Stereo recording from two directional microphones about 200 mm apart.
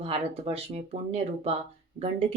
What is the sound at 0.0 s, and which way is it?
Speech, 30° right (ahead or behind).